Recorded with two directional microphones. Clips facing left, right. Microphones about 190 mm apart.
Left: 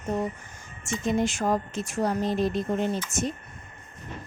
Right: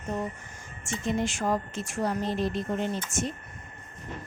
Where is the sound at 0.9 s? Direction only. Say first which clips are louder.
Left 3 dB; 40° left (ahead or behind).